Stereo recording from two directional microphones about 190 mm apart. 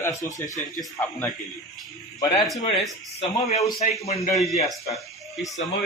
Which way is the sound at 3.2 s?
35° left (ahead or behind).